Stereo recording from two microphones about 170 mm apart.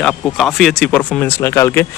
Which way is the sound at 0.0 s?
5° left (ahead or behind).